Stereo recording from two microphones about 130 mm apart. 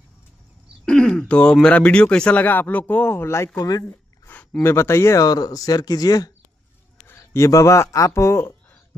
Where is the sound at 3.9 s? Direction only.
15° left (ahead or behind).